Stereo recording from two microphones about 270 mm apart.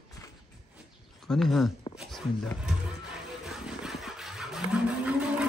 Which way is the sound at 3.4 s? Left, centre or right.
Centre.